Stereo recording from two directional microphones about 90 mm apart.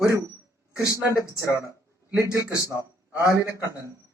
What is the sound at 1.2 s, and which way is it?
Speech, 40° left (ahead or behind).